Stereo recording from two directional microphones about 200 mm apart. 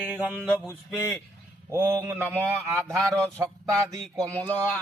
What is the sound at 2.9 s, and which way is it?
Mantra, centre (ahead or behind).